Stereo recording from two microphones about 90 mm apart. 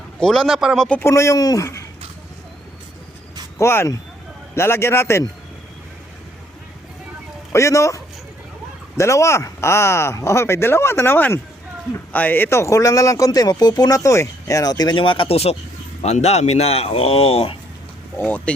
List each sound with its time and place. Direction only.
0.2 s speech: 5° left (ahead or behind)
0.9 s speech: 30° left (ahead or behind)
3.6 s speech: 25° left (ahead or behind)
7.5 s speech: 35° left (ahead or behind)
14.9 s speech: 75° left (ahead or behind)
16.6 s speech: 90° left
18.2 s speech: 15° left (ahead or behind)